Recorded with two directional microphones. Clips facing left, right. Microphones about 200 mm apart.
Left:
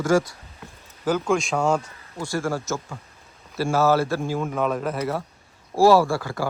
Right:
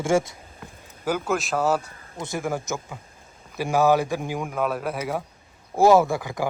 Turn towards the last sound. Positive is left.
turn(degrees=-15)  # may be behind; listen again after turning